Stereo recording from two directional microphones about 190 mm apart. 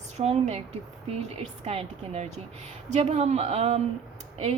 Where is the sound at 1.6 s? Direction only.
35° right (ahead or behind).